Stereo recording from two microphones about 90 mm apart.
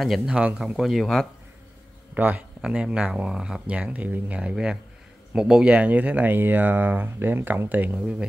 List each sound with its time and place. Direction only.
0.0 s speech: centre (ahead or behind)
2.1 s speech: 20° right (ahead or behind)